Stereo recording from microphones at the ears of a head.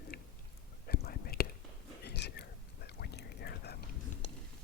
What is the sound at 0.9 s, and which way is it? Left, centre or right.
Whispering, left.